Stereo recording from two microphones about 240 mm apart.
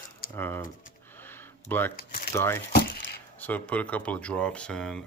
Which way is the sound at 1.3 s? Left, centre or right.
Centre.